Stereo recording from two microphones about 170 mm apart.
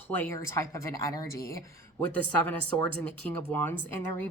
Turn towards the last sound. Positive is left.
turn(degrees=10)  # may be behind; listen again after turning